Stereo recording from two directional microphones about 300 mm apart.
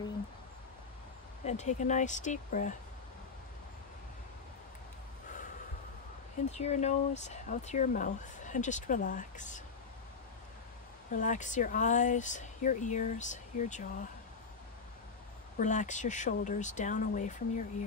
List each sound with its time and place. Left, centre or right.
1.4 s speech: left
6.5 s speech: left
11.1 s speech: left
15.6 s speech: left